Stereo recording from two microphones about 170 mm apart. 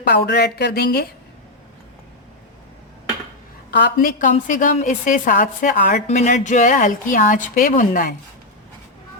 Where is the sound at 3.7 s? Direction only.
80° left; by 8.1 s 55° left (ahead or behind).